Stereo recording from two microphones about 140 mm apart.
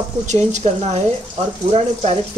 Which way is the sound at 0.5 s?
50° right (ahead or behind).